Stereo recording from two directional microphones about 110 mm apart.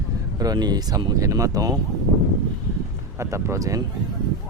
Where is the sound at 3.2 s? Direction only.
25° right (ahead or behind).